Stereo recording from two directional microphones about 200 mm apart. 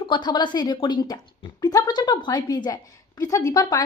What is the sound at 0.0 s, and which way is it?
A woman's voice, 25° left (ahead or behind).